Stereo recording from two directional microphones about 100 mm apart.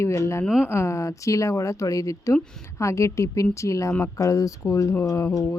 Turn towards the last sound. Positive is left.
turn(degrees=30)  # may be behind; listen again after turning